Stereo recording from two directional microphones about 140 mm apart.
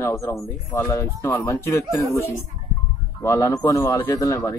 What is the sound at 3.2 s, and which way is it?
Music, 20° left (ahead or behind).